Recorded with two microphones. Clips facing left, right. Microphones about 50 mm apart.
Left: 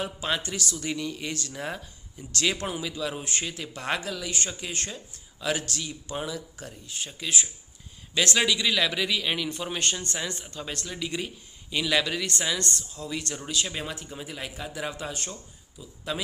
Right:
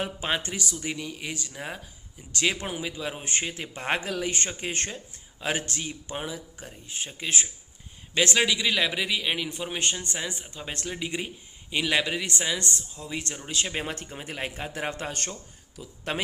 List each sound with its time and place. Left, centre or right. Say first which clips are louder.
0.0 s speech: even; right
0.3 s speech: even; centre
8.1 s speech: right 1 dB; right
13.7 s speech: right 2 dB; right